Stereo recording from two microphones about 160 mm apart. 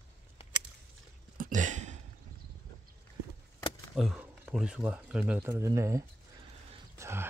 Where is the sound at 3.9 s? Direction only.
Centre (ahead or behind).